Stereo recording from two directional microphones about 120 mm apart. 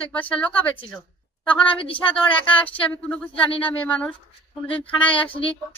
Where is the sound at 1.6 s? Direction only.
45° left (ahead or behind).